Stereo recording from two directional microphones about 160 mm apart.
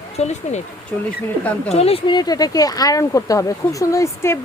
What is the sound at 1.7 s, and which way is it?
A woman's voice, 40° left (ahead or behind).